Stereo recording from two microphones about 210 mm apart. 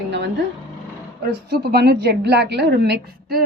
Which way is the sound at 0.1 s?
55° right (ahead or behind).